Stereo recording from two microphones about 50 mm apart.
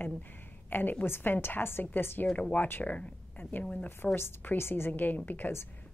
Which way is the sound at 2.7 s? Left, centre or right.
Left.